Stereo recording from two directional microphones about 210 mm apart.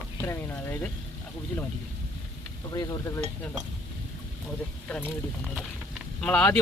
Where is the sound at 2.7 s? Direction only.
15° left (ahead or behind).